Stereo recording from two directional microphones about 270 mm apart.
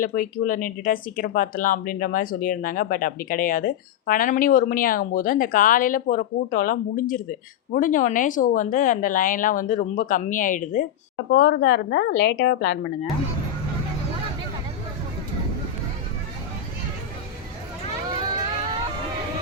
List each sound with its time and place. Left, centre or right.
0.0 s speech: left